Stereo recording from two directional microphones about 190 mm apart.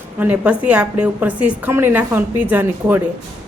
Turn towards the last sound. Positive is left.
turn(degrees=-10)  # may be behind; listen again after turning